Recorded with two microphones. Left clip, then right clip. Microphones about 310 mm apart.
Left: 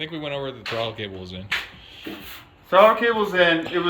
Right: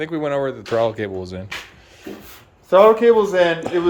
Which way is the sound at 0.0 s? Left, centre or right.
Right.